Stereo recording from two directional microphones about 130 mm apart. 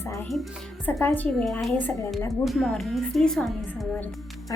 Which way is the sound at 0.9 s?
15° left (ahead or behind).